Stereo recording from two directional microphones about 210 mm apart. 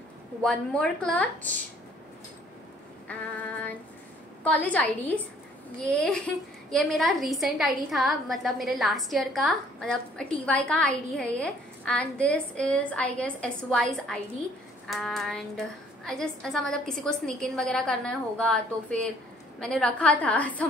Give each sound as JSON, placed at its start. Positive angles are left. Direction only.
{"t": 0.4, "sound": "a woman's voice", "side_deg": 5}
{"t": 4.5, "sound": "a woman's voice", "side_deg": 5}